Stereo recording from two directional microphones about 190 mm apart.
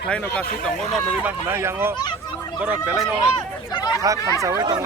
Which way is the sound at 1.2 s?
10° right (ahead or behind).